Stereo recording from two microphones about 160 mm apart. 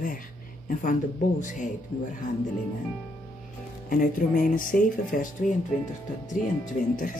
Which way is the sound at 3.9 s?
60° left (ahead or behind).